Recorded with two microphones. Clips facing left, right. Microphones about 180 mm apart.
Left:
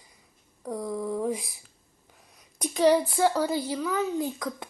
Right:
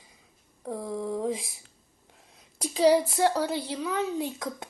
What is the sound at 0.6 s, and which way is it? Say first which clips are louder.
Speech: left 1 dB; 25° right (ahead or behind).